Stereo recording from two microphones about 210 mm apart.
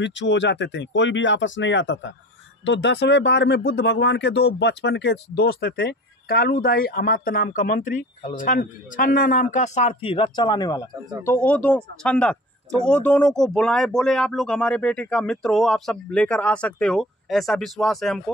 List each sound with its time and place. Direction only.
0.0 s speech: 60° left (ahead or behind); by 8.0 s 40° left (ahead or behind)
8.2 s speech: 25° left (ahead or behind)
8.5 s a man's voice: 40° left (ahead or behind); by 18.2 s centre (ahead or behind)